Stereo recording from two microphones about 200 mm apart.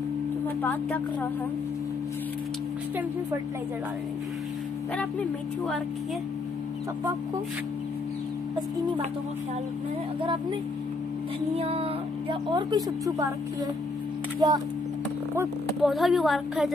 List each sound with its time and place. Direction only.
0.6 s a woman's voice: 10° left (ahead or behind)
11.5 s speech: 30° right (ahead or behind)
14.4 s speech: 20° right (ahead or behind)
15.8 s a woman's voice: centre (ahead or behind)